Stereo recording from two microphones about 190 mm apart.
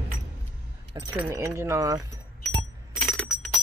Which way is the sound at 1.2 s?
15° right (ahead or behind).